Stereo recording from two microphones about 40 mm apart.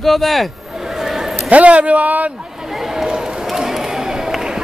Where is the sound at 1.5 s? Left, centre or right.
Right.